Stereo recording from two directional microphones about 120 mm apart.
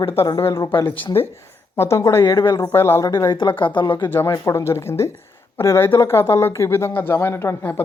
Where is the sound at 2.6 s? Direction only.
20° left (ahead or behind).